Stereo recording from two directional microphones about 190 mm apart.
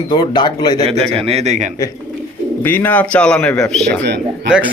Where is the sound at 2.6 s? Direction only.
10° left (ahead or behind); by 4.7 s 5° right (ahead or behind).